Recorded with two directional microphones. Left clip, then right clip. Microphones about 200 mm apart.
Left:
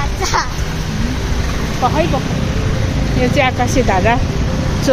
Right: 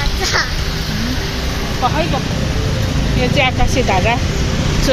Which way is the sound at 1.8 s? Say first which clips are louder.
Left 1 dB; 25° left (ahead or behind).